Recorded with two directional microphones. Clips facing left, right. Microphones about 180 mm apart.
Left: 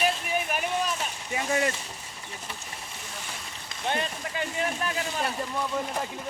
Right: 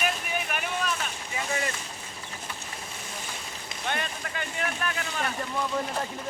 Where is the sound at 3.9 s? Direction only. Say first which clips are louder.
Left 3 dB; 25° left (ahead or behind).